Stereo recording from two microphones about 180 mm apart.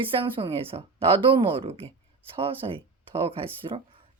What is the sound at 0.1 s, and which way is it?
Speech, 30° right (ahead or behind).